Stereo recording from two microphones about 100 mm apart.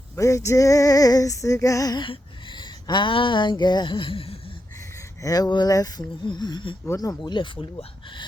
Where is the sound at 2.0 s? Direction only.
50° left (ahead or behind); by 4.5 s 70° left (ahead or behind).